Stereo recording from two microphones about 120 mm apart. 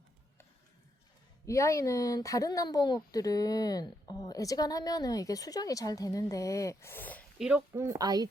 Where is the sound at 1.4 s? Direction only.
25° left (ahead or behind).